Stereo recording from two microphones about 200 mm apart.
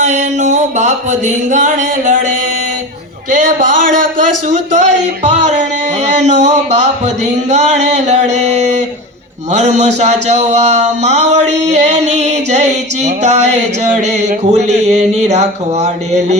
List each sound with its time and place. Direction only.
0.0 s speech: 35° right (ahead or behind)
3.2 s speech: 40° right (ahead or behind)